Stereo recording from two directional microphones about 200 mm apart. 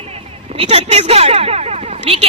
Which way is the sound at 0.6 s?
30° right (ahead or behind).